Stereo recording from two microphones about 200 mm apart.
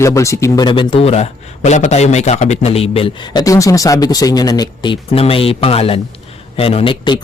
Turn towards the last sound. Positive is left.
turn(degrees=25)  # may be behind; listen again after turning